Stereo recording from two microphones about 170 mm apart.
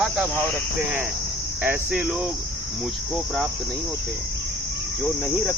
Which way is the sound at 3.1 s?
Centre (ahead or behind).